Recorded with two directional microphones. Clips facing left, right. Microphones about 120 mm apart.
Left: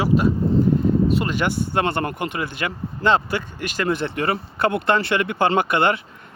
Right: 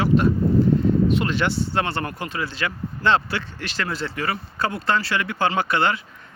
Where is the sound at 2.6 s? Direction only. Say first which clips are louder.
Left 1 dB; 15° left (ahead or behind).